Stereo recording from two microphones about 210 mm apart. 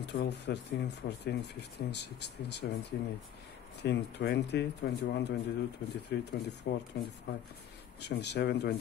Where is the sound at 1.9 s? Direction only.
55° left (ahead or behind).